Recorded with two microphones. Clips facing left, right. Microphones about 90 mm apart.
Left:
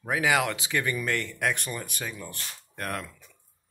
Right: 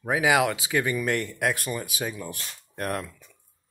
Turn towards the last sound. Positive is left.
turn(degrees=-15)  # may be behind; listen again after turning